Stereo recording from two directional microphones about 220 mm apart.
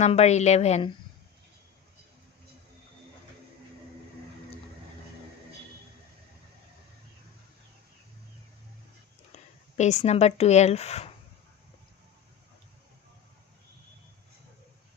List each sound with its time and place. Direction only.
0.0 s a woman's voice: 30° left (ahead or behind)
9.3 s speech: 30° left (ahead or behind)